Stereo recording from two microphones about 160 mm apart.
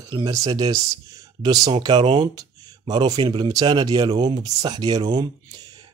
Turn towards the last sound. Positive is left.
turn(degrees=-25)  # may be behind; listen again after turning